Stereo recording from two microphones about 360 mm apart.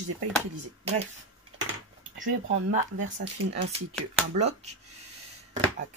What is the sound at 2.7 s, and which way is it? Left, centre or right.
Speech, right.